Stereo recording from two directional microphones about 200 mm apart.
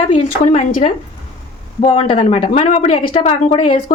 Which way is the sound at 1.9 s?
25° left (ahead or behind).